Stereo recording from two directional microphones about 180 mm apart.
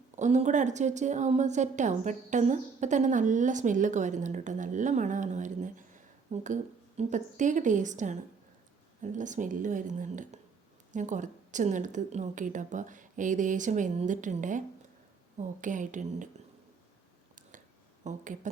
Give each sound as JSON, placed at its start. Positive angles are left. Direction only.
{"t": 0.2, "sound": "a woman's voice", "side_deg": -40}
{"t": 18.0, "sound": "speech", "side_deg": -40}